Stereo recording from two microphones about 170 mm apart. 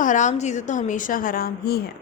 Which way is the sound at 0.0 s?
45° left (ahead or behind).